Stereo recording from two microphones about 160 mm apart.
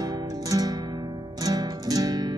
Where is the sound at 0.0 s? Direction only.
25° right (ahead or behind).